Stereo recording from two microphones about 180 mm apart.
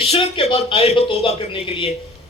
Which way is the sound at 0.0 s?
30° left (ahead or behind).